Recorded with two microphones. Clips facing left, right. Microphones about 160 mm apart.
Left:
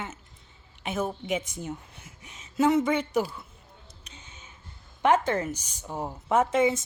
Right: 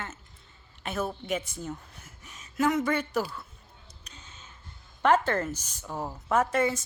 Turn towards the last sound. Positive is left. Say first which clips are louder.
# left 3 dB
turn(degrees=20)  # may be behind; listen again after turning